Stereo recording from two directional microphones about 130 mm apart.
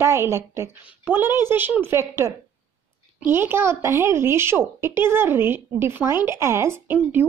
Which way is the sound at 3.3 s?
20° right (ahead or behind).